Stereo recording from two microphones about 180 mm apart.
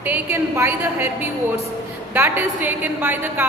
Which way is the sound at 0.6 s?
15° right (ahead or behind).